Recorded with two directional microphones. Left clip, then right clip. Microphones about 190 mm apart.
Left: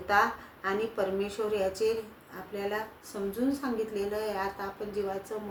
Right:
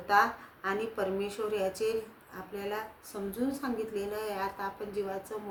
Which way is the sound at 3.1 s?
15° right (ahead or behind).